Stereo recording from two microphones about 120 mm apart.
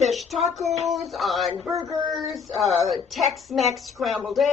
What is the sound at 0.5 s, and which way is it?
A woman's voice, centre (ahead or behind).